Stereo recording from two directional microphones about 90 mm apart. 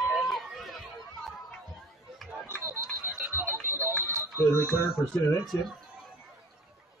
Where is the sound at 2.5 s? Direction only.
25° right (ahead or behind).